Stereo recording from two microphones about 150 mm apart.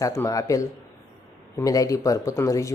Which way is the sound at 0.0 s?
25° left (ahead or behind).